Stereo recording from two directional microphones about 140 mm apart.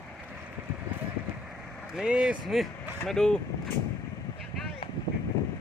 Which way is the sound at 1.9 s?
5° right (ahead or behind).